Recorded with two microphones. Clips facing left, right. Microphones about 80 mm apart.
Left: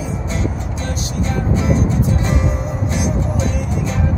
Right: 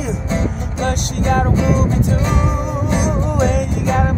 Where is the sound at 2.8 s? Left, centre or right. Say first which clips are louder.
Right 2 dB; right.